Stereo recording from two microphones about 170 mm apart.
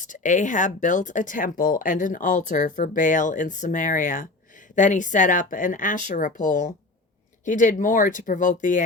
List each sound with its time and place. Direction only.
0.0 s speech: 50° left (ahead or behind)